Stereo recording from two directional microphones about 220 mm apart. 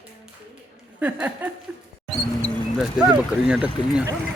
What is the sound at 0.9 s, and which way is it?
Speech, 5° right (ahead or behind).